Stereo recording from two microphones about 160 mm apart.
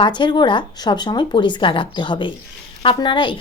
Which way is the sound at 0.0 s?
30° left (ahead or behind).